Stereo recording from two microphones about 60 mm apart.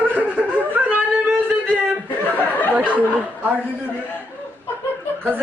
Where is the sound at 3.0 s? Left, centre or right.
Right.